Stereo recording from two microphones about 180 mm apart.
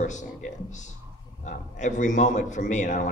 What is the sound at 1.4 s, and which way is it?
Speech, 45° left (ahead or behind).